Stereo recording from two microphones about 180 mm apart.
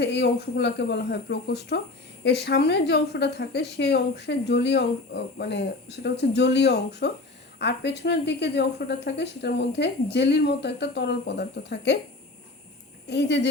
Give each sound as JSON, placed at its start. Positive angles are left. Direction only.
{"t": 0.0, "sound": "a woman's voice", "side_deg": 70}
{"t": 13.1, "sound": "a woman's voice", "side_deg": 70}